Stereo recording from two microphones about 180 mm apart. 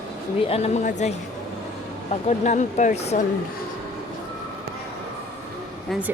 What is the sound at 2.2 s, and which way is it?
Speech, 40° left (ahead or behind).